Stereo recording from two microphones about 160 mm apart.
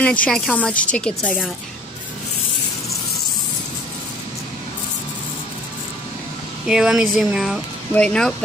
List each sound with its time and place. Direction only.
0.0 s a woman's voice: 10° left (ahead or behind)
6.7 s speech: 5° right (ahead or behind)